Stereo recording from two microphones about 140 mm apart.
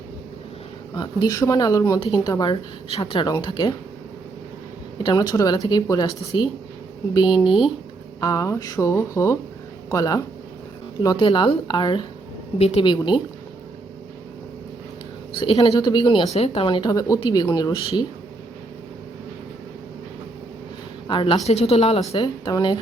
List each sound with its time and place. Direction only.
0.9 s speech: 30° left (ahead or behind)
5.0 s speech: 30° left (ahead or behind)
12.5 s speech: 45° left (ahead or behind)
15.5 s speech: 30° left (ahead or behind)
16.3 s speech: 45° left (ahead or behind); by 18.0 s 30° left (ahead or behind)
21.1 s a woman's voice: 40° left (ahead or behind)
21.4 s speech: 50° left (ahead or behind)
22.1 s speech: 30° left (ahead or behind)